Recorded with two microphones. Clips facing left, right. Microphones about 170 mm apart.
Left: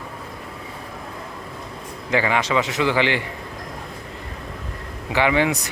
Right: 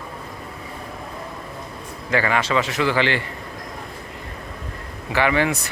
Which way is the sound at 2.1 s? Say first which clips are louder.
Even; 15° left (ahead or behind).